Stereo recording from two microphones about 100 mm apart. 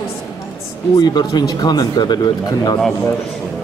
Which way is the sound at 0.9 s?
40° left (ahead or behind).